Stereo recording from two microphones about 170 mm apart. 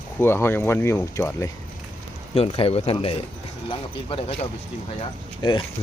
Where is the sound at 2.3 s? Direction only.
35° left (ahead or behind).